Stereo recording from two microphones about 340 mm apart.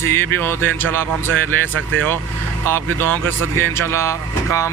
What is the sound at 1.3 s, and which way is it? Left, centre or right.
Speech, right.